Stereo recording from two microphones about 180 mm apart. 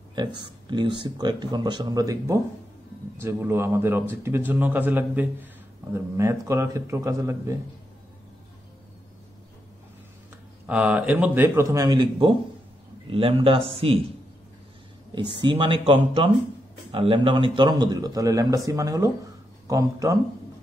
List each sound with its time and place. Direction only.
0.4 s a man's voice: 25° right (ahead or behind)
10.7 s a man's voice: 5° right (ahead or behind); by 13.9 s 30° right (ahead or behind)
15.4 s speech: 30° right (ahead or behind)